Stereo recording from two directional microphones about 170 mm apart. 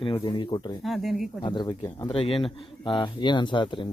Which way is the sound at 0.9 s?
Centre (ahead or behind).